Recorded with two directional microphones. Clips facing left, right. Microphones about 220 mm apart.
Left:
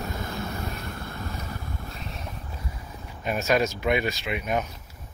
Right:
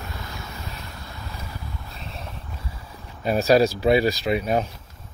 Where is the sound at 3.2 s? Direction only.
35° right (ahead or behind).